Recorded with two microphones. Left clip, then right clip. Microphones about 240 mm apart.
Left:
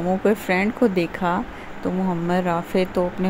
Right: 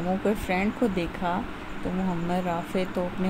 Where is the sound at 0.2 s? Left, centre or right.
Centre.